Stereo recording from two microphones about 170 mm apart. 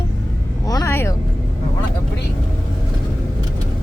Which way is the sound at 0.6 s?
20° left (ahead or behind).